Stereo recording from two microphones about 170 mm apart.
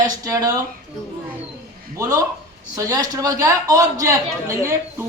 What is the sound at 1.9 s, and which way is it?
A man's voice, 20° right (ahead or behind).